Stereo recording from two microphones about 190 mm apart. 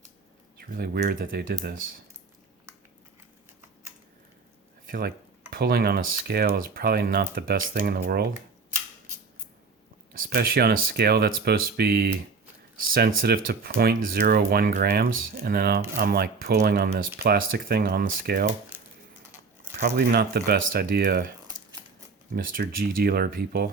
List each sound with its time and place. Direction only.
0.7 s speech: 55° right (ahead or behind)
4.9 s speech: 50° right (ahead or behind)
10.2 s speech: 50° right (ahead or behind)
20.0 s speech: 55° right (ahead or behind)
22.4 s speech: 45° right (ahead or behind)